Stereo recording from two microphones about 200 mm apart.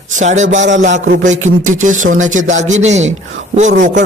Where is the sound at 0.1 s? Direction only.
35° right (ahead or behind).